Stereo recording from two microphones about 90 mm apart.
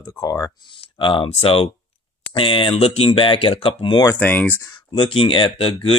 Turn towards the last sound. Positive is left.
turn(degrees=85)